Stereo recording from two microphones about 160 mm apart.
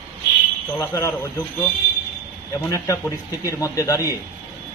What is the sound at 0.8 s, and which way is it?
Speech, 20° left (ahead or behind).